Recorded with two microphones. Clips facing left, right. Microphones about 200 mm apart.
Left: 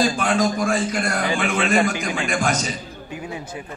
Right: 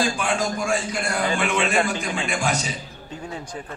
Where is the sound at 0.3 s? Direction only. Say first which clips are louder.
Left 4 dB; 55° left (ahead or behind).